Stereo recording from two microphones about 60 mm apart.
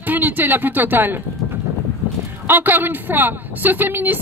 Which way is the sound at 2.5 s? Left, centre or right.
Right.